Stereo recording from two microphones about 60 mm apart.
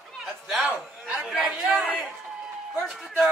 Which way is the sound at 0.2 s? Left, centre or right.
Centre.